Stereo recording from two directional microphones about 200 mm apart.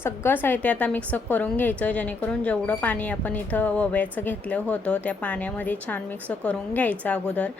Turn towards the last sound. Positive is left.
turn(degrees=5)  # may be behind; listen again after turning